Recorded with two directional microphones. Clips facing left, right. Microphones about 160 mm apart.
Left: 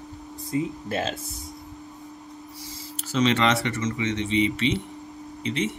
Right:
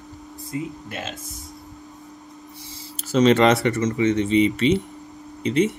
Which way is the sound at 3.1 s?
40° right (ahead or behind).